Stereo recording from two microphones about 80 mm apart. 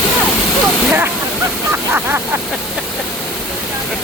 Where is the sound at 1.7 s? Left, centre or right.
Right.